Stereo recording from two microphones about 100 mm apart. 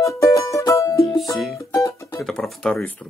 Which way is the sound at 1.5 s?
30° left (ahead or behind).